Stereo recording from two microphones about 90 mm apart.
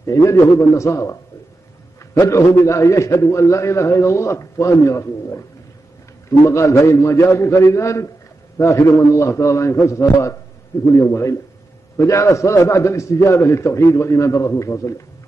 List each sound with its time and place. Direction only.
0.0 s a man's voice: 35° left (ahead or behind)
2.1 s a man's voice: 35° left (ahead or behind)
6.4 s a man's voice: 30° left (ahead or behind)